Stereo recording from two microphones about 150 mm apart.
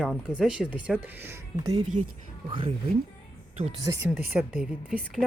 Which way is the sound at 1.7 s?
50° right (ahead or behind).